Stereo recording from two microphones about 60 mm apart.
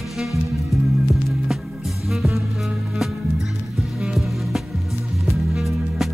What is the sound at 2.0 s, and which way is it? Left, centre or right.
Music, centre.